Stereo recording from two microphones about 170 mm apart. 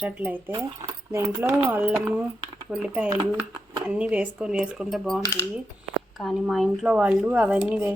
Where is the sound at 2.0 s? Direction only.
5° right (ahead or behind).